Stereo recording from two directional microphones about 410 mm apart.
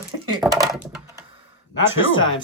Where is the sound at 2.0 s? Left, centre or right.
Left.